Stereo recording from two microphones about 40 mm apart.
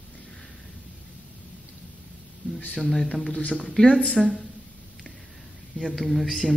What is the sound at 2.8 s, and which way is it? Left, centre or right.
Speech, centre.